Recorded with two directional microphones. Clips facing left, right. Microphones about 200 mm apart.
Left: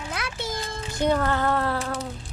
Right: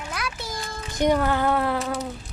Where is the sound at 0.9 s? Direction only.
15° right (ahead or behind).